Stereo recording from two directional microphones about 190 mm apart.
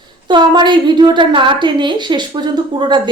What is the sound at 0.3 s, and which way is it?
A woman's voice, 25° right (ahead or behind).